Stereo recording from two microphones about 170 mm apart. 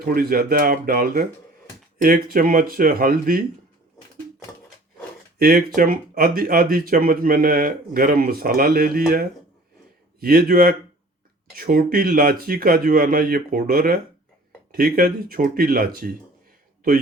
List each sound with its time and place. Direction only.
0.0 s speech: 60° right (ahead or behind)
5.4 s speech: 60° right (ahead or behind)